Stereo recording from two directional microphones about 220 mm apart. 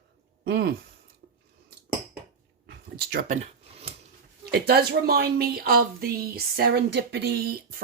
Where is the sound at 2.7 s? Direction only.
45° right (ahead or behind); by 4.0 s 25° right (ahead or behind).